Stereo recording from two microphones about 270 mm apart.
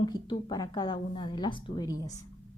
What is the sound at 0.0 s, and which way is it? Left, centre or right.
A woman's voice, centre.